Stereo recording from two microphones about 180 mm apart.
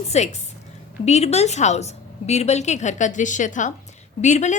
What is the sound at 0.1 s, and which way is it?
A woman's voice, 40° left (ahead or behind).